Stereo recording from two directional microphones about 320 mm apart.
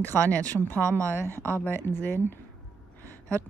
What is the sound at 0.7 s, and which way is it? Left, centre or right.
Speech, centre.